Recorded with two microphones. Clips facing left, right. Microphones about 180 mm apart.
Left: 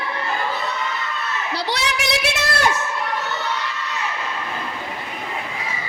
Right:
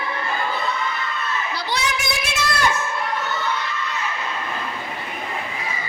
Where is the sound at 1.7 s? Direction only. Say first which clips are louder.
Left 1 dB; 70° left (ahead or behind).